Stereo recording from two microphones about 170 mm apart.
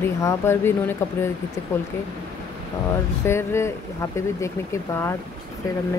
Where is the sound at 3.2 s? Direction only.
15° left (ahead or behind).